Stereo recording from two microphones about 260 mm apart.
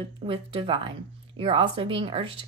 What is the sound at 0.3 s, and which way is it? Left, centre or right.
Speech, right.